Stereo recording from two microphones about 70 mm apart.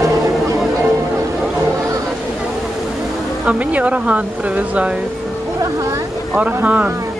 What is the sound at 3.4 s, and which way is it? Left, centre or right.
Speech, centre.